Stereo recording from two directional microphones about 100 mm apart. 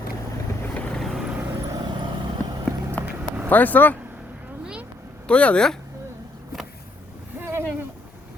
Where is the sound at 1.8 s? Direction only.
50° right (ahead or behind).